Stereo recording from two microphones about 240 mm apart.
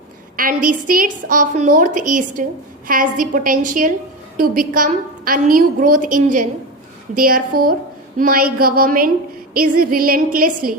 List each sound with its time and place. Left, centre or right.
0.3 s a woman's voice: right